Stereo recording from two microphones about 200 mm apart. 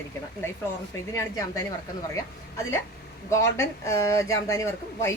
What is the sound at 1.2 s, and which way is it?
Speech, 15° left (ahead or behind).